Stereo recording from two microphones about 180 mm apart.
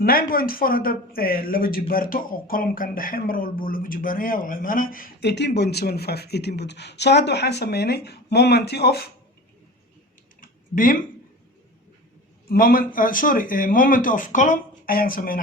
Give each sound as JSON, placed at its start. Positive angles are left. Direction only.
{"t": 0.0, "sound": "speech", "side_deg": 55}
{"t": 10.4, "sound": "typing", "side_deg": 50}
{"t": 12.5, "sound": "speech", "side_deg": 55}